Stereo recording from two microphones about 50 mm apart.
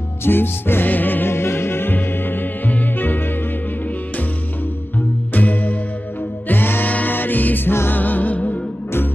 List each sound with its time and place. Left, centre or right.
0.2 s music: left
5.3 s music: left
6.5 s music: left